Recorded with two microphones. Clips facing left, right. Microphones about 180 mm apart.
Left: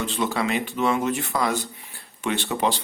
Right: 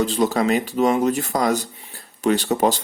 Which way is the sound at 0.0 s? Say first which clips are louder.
Right 6 dB; 40° right (ahead or behind).